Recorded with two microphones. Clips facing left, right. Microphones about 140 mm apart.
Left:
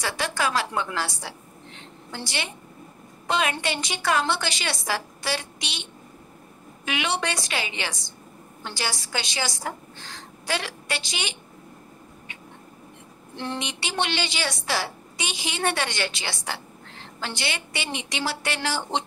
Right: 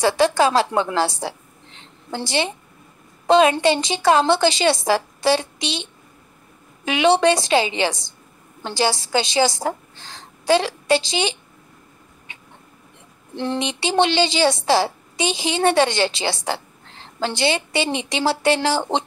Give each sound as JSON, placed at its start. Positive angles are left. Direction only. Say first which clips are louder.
{"t": 0.0, "sound": "a woman's voice", "louder": "right 10 dB", "side_deg": -30}
{"t": 13.4, "sound": "a woman's voice", "louder": "right 8 dB", "side_deg": -30}